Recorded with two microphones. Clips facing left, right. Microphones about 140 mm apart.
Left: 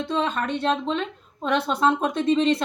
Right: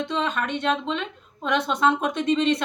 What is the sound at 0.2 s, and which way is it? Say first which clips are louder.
A woman's voice: left 3 dB; 35° left (ahead or behind).